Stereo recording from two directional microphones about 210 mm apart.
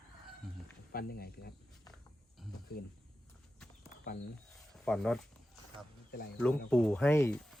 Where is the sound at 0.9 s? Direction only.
45° left (ahead or behind).